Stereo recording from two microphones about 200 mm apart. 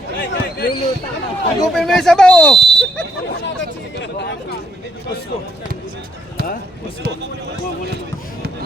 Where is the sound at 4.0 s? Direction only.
55° left (ahead or behind).